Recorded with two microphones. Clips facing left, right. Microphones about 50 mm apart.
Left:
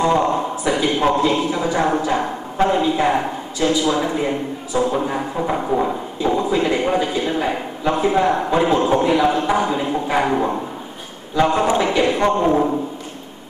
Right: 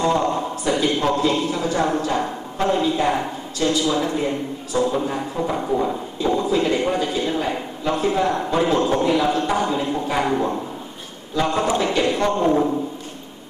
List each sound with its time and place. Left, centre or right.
0.0 s a man's voice: centre